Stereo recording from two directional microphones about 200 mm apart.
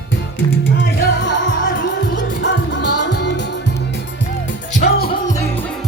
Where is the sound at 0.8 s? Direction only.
65° left (ahead or behind).